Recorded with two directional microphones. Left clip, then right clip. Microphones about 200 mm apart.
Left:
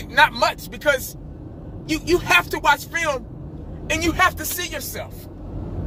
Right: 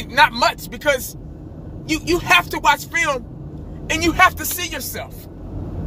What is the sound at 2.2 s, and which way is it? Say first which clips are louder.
Speech: right 5 dB; 30° right (ahead or behind).